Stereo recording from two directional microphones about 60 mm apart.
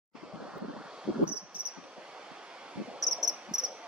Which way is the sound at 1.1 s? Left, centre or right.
Centre.